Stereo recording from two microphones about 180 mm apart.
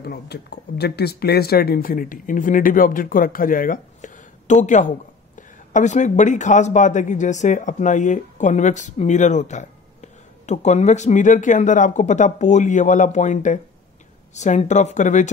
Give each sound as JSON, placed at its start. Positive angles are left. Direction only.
{"t": 0.0, "sound": "a woman's voice", "side_deg": 65}